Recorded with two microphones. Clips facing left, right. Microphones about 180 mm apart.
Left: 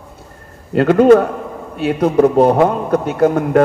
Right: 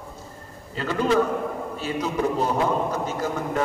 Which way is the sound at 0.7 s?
60° left (ahead or behind).